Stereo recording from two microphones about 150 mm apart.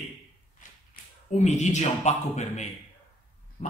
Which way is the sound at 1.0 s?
75° left (ahead or behind).